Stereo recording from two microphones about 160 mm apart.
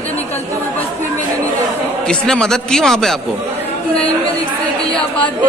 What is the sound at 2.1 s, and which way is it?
A man's voice, 5° left (ahead or behind).